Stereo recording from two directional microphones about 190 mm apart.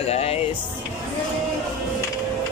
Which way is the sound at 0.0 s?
30° left (ahead or behind).